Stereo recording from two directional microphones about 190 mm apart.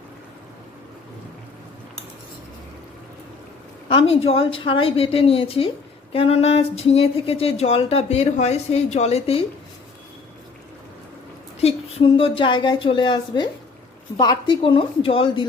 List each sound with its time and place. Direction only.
3.8 s a woman's voice: 30° left (ahead or behind)
11.6 s a woman's voice: 30° left (ahead or behind)